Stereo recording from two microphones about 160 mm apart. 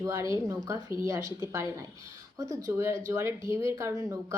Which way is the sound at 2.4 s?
20° right (ahead or behind).